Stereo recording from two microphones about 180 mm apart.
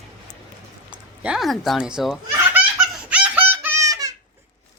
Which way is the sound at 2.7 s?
5° right (ahead or behind).